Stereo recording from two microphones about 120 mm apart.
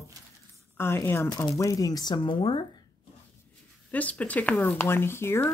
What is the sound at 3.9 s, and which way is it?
Speech, 10° left (ahead or behind).